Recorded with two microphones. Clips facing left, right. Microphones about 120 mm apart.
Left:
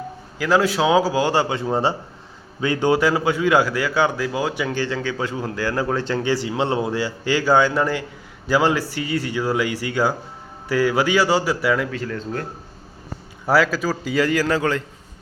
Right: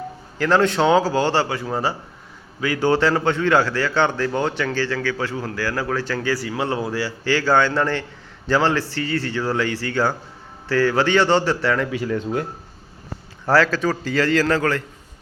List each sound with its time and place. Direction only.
0.3 s a man's voice: 5° left (ahead or behind)
11.9 s speech: 10° right (ahead or behind)
13.4 s a man's voice: 10° left (ahead or behind)